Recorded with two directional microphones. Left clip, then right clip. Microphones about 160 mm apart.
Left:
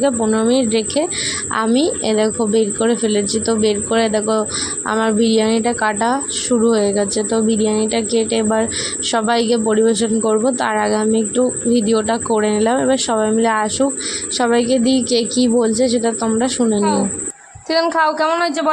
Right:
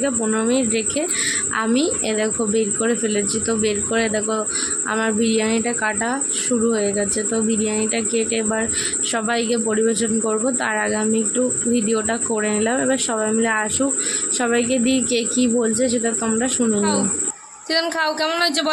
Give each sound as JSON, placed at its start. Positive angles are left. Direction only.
{"t": 0.0, "sound": "speech", "side_deg": 20}